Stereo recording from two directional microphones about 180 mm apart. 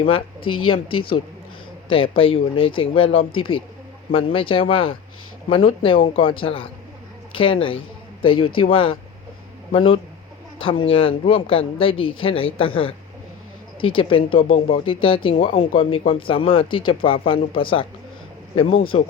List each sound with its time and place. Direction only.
0.7 s speech: 30° left (ahead or behind)